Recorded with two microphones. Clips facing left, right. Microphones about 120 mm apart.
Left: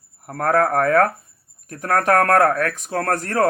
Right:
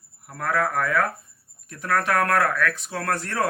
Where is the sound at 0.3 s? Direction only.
50° left (ahead or behind).